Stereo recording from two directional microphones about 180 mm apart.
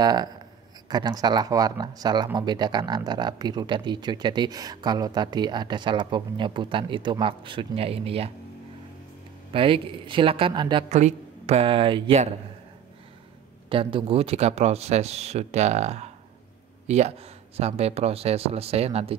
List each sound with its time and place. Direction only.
0.0 s speech: 20° right (ahead or behind)
9.5 s speech: 30° right (ahead or behind)
10.9 s speech: 40° right (ahead or behind)
13.7 s speech: 30° right (ahead or behind)